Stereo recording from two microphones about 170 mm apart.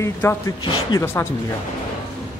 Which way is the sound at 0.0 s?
15° left (ahead or behind).